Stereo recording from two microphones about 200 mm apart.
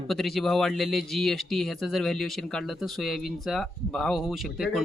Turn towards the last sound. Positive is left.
turn(degrees=0)  # may be behind; listen again after turning